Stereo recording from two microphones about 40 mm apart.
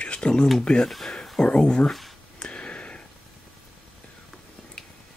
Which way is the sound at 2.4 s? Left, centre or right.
Left.